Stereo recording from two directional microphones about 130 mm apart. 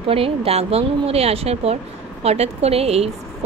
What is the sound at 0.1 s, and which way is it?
A woman's voice, 50° right (ahead or behind).